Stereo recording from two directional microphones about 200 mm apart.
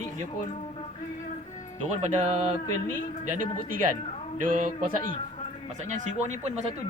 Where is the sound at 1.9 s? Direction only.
35° right (ahead or behind).